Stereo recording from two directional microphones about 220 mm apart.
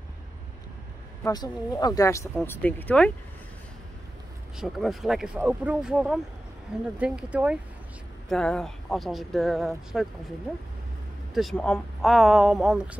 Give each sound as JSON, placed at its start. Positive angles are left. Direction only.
{"t": 1.2, "sound": "speech", "side_deg": 20}
{"t": 4.6, "sound": "speech", "side_deg": 0}
{"t": 11.3, "sound": "speech", "side_deg": 0}